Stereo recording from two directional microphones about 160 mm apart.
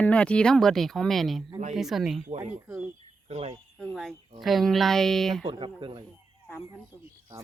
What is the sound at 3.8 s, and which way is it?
Speech, centre (ahead or behind).